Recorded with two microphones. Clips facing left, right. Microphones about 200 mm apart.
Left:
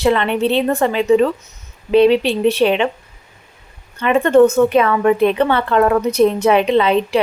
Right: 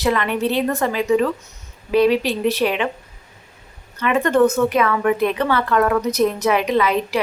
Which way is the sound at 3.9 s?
25° left (ahead or behind).